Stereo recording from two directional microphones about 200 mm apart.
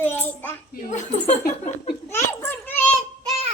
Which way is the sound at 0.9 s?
35° left (ahead or behind).